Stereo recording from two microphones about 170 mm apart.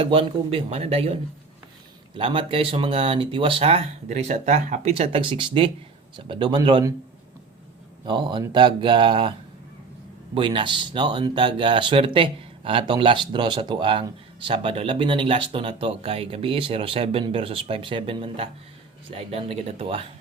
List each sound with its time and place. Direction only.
0.0 s speech: 35° right (ahead or behind)
8.0 s speech: 25° right (ahead or behind)
10.3 s speech: 30° right (ahead or behind)